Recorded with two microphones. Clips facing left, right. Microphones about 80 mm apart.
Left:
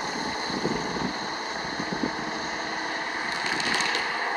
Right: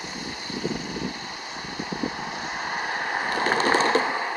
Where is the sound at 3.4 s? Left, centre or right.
Right.